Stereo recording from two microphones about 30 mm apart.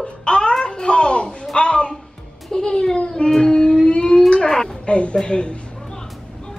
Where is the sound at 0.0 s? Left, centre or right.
Left.